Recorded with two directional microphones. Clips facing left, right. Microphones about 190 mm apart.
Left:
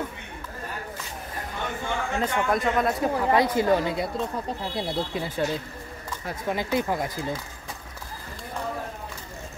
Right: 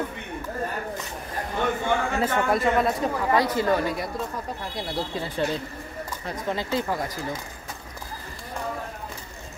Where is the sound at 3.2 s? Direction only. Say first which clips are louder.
Left 1 dB; 20° left (ahead or behind).